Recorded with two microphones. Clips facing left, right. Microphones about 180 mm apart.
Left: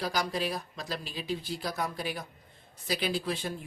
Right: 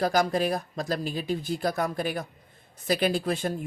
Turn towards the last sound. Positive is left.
turn(degrees=-50)  # may be behind; listen again after turning